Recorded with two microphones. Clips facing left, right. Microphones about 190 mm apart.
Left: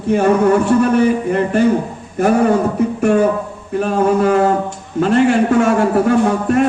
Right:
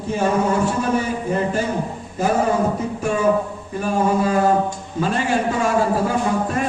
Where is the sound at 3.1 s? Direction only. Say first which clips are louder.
Left 2 dB; 65° left (ahead or behind).